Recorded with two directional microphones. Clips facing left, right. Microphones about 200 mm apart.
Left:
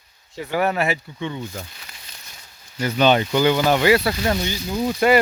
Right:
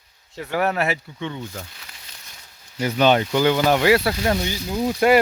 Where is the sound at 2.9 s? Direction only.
5° right (ahead or behind).